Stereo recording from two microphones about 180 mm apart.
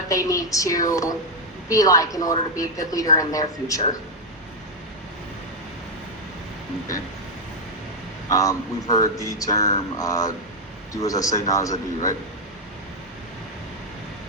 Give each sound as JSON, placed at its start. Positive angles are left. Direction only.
{"t": 0.1, "sound": "a woman's voice", "side_deg": 20}
{"t": 8.3, "sound": "a woman's voice", "side_deg": 20}